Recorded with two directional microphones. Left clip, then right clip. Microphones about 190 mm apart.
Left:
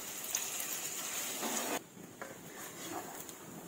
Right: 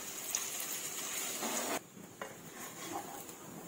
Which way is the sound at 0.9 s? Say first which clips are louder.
Even; 5° left (ahead or behind).